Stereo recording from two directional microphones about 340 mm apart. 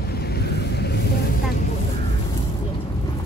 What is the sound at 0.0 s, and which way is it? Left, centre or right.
Vehicle, left.